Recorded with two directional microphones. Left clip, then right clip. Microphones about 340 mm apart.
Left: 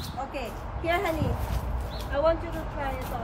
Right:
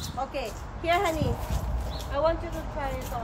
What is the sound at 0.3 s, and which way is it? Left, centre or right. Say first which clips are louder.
Speech: right 1 dB; centre.